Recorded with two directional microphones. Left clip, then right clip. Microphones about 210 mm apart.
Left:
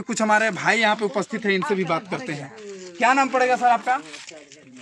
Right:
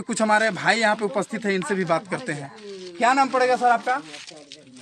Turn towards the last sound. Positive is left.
turn(degrees=-5)  # may be behind; listen again after turning